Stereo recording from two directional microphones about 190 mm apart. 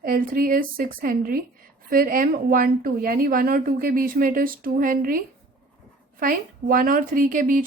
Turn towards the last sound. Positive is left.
turn(degrees=-45)  # may be behind; listen again after turning